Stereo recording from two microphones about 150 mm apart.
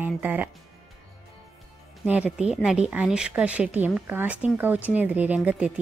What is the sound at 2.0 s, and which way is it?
Speech, 5° right (ahead or behind).